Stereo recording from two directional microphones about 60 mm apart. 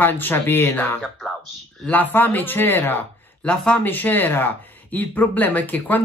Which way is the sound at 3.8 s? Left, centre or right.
Left.